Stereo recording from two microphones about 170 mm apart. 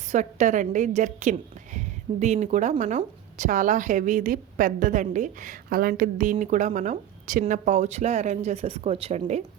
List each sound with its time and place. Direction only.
0.1 s a woman's voice: 45° right (ahead or behind)